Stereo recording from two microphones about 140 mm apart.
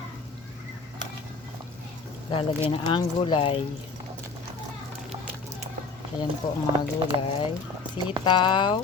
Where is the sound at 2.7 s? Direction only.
40° left (ahead or behind).